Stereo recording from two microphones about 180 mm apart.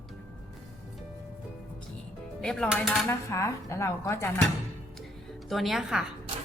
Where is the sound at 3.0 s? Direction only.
15° left (ahead or behind).